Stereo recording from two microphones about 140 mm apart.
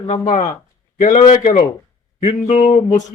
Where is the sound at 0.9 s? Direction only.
70° left (ahead or behind).